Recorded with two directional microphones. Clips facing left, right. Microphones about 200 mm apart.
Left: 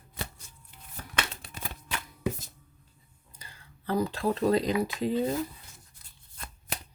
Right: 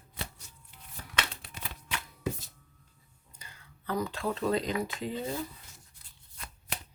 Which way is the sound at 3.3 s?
30° left (ahead or behind).